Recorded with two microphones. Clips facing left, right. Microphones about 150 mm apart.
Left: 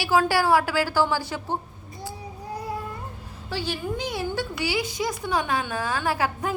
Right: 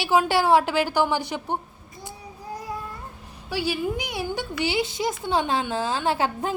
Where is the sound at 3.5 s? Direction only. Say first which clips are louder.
Right 3 dB; 10° right (ahead or behind).